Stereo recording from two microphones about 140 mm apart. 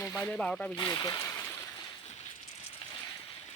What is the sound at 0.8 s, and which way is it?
Speech, 30° left (ahead or behind).